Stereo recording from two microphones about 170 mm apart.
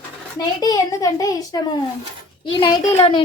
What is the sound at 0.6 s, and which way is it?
A woman's voice, 20° left (ahead or behind).